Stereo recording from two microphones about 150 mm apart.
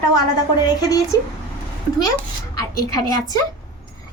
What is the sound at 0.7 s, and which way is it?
Speech, 25° left (ahead or behind).